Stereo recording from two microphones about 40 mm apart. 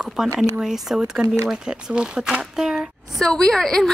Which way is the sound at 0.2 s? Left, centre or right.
Centre.